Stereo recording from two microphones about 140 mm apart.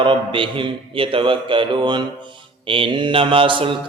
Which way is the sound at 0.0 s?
35° right (ahead or behind).